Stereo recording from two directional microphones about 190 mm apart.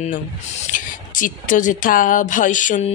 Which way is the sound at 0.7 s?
45° left (ahead or behind).